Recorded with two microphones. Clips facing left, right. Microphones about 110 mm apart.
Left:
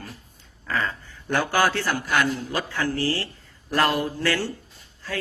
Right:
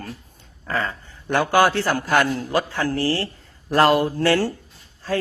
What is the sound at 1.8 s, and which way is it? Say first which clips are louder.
Speech: right 4 dB; 40° right (ahead or behind).